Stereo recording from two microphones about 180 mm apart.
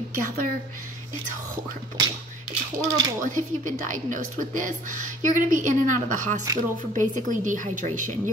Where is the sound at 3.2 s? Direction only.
45° right (ahead or behind).